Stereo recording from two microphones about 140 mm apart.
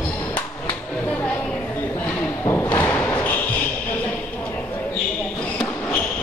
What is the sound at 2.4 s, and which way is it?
Thump, 15° left (ahead or behind).